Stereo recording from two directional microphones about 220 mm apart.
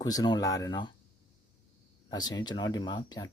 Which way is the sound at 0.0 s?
15° left (ahead or behind).